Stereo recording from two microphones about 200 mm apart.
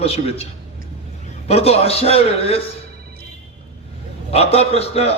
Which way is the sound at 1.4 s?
30° left (ahead or behind).